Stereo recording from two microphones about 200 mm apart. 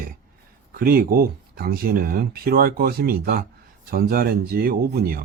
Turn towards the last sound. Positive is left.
turn(degrees=-50)  # may be behind; listen again after turning